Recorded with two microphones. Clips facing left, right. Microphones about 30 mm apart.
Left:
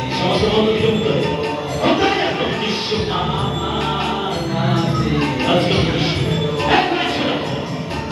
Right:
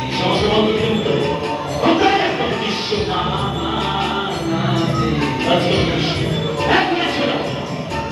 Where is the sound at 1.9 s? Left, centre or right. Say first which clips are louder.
Right 2 dB; centre.